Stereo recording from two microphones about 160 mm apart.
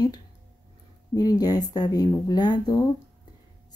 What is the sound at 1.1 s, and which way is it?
Speech, 25° left (ahead or behind).